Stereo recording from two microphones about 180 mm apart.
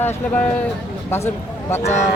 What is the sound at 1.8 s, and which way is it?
Speech, 40° left (ahead or behind).